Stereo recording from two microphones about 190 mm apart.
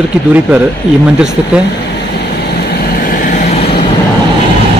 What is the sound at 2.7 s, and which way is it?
Vehicle, 50° left (ahead or behind).